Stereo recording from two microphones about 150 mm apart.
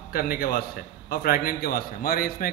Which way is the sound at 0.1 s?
85° left.